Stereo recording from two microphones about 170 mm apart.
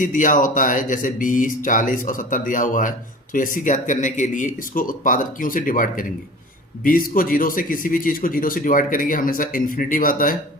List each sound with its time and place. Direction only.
0.0 s speech: 50° left (ahead or behind)